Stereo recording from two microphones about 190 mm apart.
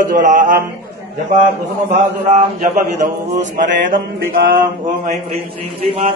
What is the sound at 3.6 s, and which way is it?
Speech, 45° right (ahead or behind).